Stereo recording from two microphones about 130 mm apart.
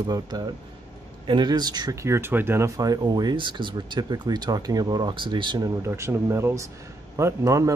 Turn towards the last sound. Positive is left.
turn(degrees=-25)  # may be behind; listen again after turning